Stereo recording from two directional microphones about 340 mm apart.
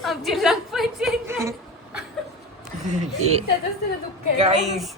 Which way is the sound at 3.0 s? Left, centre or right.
Centre.